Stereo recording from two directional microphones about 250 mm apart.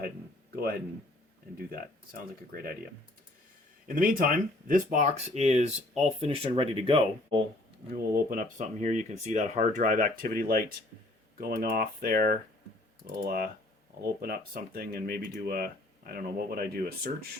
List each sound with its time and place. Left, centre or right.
0.5 s speech: right
2.5 s speech: right
3.8 s speech: right
7.9 s speech: right